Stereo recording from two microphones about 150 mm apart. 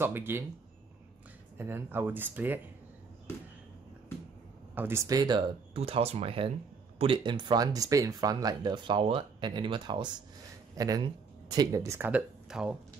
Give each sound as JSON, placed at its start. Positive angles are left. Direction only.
{"t": 0.0, "sound": "speech", "side_deg": -15}
{"t": 1.6, "sound": "speech", "side_deg": -15}
{"t": 4.7, "sound": "speech", "side_deg": -15}
{"t": 5.8, "sound": "speech", "side_deg": -40}